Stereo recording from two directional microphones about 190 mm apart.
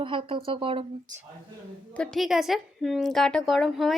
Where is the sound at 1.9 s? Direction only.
5° left (ahead or behind).